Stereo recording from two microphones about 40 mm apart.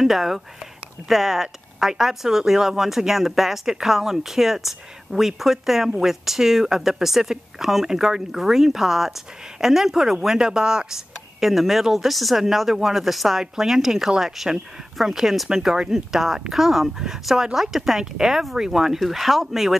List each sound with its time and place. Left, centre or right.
0.0 s speech: centre
11.3 s speech: centre
15.7 s speech: centre
16.1 s speech: centre